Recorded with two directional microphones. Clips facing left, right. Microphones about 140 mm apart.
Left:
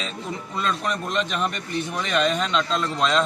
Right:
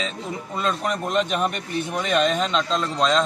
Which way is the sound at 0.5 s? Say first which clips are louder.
Right 2 dB; 45° right (ahead or behind).